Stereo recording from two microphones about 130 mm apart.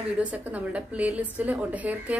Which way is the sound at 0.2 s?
10° right (ahead or behind).